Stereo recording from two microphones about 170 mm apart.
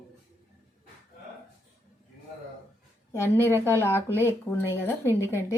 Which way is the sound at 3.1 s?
15° left (ahead or behind).